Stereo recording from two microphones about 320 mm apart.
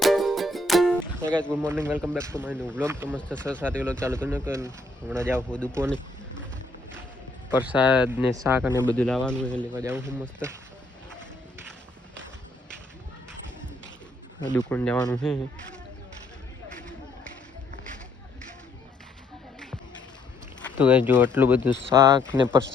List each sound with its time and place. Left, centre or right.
0.0 s music: centre
1.6 s speech: centre
3.4 s speech: centre
4.0 s speech: centre
5.4 s speech: centre
7.6 s speech: centre
9.7 s speech: centre
14.4 s speech: centre
20.7 s speech: centre
22.2 s speech: centre